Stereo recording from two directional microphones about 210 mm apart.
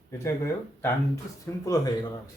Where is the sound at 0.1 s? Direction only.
15° left (ahead or behind).